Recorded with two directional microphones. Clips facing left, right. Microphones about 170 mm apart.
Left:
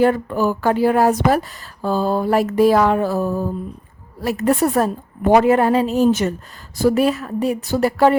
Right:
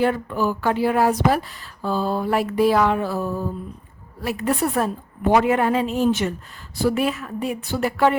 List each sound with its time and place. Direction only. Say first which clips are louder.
0.0 s a woman's voice: left 4 dB; 45° left (ahead or behind)